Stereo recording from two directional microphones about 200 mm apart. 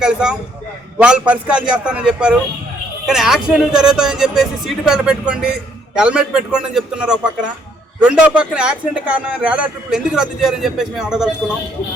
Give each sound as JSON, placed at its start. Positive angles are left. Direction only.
{"t": 0.0, "sound": "speech", "side_deg": -5}